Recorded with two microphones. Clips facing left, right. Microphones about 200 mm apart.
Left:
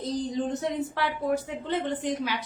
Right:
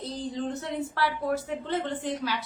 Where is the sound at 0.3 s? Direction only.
15° left (ahead or behind).